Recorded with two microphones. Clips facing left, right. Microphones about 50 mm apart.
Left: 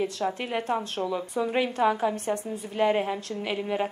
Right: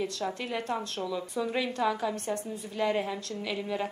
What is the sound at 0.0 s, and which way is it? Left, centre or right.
A woman's voice, left.